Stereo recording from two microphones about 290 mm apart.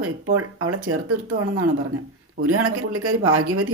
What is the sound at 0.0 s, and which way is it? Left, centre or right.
Speech, right.